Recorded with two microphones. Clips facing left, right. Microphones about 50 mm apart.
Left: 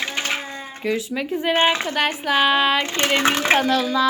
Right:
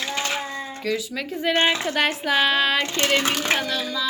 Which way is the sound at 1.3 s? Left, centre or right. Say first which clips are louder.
Left 2 dB; centre.